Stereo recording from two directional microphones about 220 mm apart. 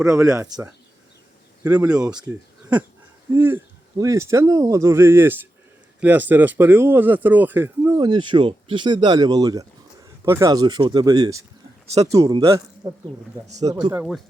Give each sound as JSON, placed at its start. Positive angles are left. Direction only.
{"t": 0.1, "sound": "speech", "side_deg": -10}
{"t": 13.9, "sound": "speech", "side_deg": -5}